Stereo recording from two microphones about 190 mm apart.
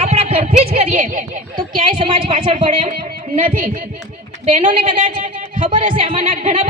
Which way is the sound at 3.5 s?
50° right (ahead or behind).